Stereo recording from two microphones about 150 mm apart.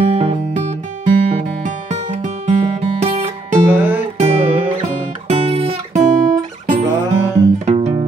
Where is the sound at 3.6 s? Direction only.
10° right (ahead or behind).